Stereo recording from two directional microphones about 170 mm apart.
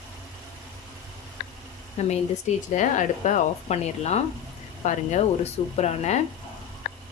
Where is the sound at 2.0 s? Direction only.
40° left (ahead or behind).